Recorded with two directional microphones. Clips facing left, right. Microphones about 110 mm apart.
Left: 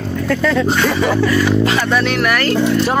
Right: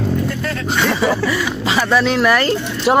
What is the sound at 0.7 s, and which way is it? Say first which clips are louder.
Speech: left 1 dB; 5° right (ahead or behind).